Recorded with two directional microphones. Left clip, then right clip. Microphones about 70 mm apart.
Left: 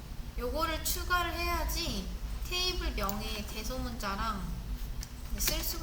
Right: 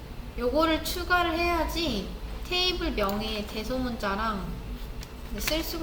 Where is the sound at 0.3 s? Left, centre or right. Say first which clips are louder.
Right 9 dB; left.